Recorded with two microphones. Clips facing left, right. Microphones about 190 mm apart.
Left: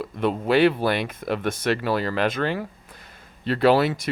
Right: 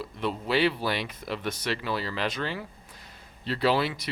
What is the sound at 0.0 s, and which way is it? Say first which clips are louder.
Speech: left 7 dB; 55° left (ahead or behind).